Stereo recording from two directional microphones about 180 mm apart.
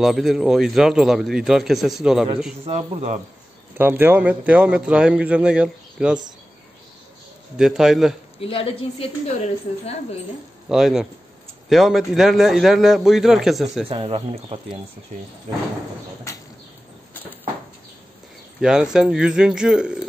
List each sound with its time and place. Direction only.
0.0 s a man's voice: centre (ahead or behind)
2.6 s speech: 40° right (ahead or behind)
3.7 s a man's voice: 10° right (ahead or behind)
7.5 s a man's voice: 5° right (ahead or behind)
8.4 s a woman's voice: 30° left (ahead or behind)
10.7 s a man's voice: centre (ahead or behind)
13.8 s speech: 30° right (ahead or behind)
18.6 s a man's voice: 5° right (ahead or behind)